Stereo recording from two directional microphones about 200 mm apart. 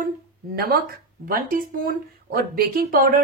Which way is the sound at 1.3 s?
45° right (ahead or behind).